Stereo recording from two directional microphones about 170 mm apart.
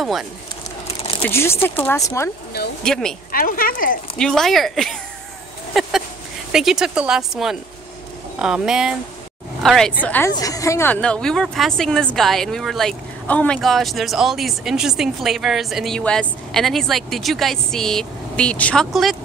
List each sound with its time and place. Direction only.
0.0 s speech: centre (ahead or behind)
1.3 s speech: 15° left (ahead or behind)
2.8 s speech: 5° left (ahead or behind)
3.3 s speech: 60° left (ahead or behind)
4.2 s speech: 5° left (ahead or behind)
5.8 s a sound: centre (ahead or behind)
6.5 s speech: centre (ahead or behind)
10.3 s speech: 20° left (ahead or behind); by 19.1 s centre (ahead or behind)